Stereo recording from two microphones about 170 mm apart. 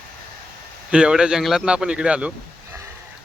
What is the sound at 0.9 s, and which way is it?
Speech, 5° right (ahead or behind).